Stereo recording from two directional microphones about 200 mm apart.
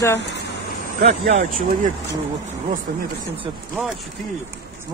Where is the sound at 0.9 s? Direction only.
40° right (ahead or behind).